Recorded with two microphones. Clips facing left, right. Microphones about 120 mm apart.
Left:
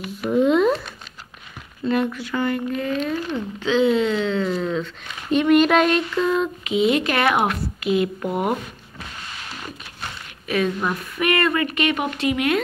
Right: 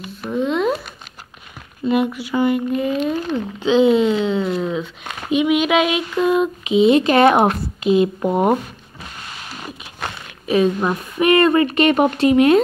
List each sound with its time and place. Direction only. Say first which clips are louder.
0.2 s a sound: left 3 dB; 10° left (ahead or behind)
1.9 s speech: right 3 dB; 15° right (ahead or behind); by 8.5 s 30° right (ahead or behind)
10.5 s speech: right 5 dB; 25° right (ahead or behind)